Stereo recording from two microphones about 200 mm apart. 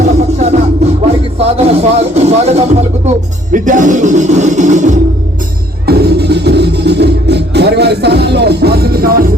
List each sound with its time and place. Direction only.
0.0 s music: 35° right (ahead or behind)
1.4 s speech: 30° right (ahead or behind)
5.8 s music: 55° right (ahead or behind)